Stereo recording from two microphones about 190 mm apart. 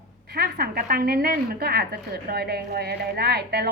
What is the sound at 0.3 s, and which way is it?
A woman's voice, 55° right (ahead or behind).